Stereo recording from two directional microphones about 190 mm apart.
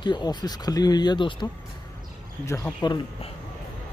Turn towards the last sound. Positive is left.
turn(degrees=25)  # may be behind; listen again after turning